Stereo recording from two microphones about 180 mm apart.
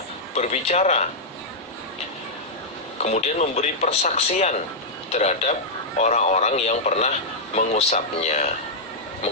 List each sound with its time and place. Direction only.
0.3 s a man's voice: 40° left (ahead or behind)
3.0 s a man's voice: 40° left (ahead or behind)